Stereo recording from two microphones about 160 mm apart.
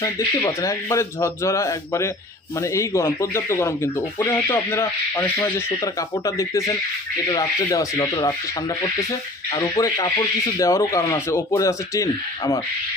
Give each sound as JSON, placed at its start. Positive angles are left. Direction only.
{"t": 0.0, "sound": "speech", "side_deg": 20}
{"t": 9.5, "sound": "speech", "side_deg": 20}